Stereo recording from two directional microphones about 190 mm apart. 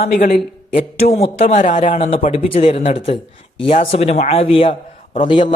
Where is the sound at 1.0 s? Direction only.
35° left (ahead or behind).